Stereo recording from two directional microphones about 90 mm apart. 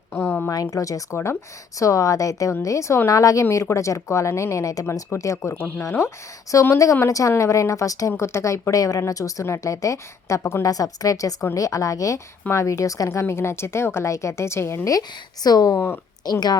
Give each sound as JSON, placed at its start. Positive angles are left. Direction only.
{"t": 0.1, "sound": "a sound", "side_deg": 25}
{"t": 0.5, "sound": "a woman's voice", "side_deg": 40}
{"t": 15.4, "sound": "speech", "side_deg": 45}